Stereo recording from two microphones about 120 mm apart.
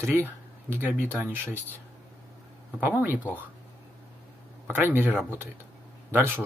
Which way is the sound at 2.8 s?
15° right (ahead or behind).